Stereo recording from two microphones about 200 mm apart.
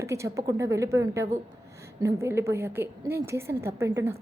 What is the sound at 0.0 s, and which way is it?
A woman's voice, 15° right (ahead or behind).